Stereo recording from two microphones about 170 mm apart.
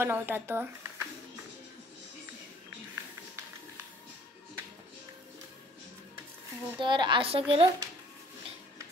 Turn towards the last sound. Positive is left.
turn(degrees=-20)  # may be behind; listen again after turning